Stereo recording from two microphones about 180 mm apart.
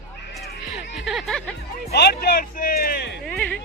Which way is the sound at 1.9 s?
60° left (ahead or behind).